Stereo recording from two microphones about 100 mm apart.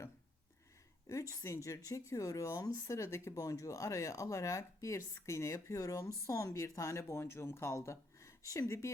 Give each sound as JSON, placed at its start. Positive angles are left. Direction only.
{"t": 1.0, "sound": "speech", "side_deg": 30}